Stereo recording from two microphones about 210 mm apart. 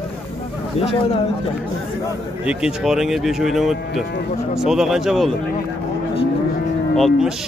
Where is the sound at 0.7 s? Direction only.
30° left (ahead or behind).